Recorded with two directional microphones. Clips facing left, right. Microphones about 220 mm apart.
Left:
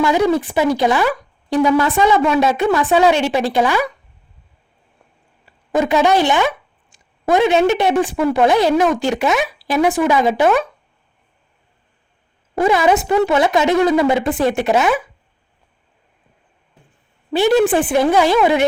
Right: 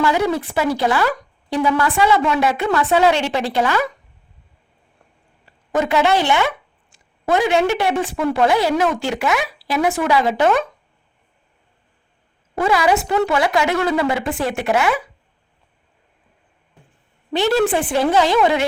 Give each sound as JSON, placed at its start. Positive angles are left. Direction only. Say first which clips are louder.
{"t": 0.0, "sound": "a woman's voice", "louder": "left 3 dB", "side_deg": 15}
{"t": 5.5, "sound": "a woman's voice", "louder": "left 3 dB", "side_deg": 15}
{"t": 12.5, "sound": "a woman's voice", "louder": "left 3 dB", "side_deg": 20}
{"t": 17.3, "sound": "a woman's voice", "louder": "left 4 dB", "side_deg": 15}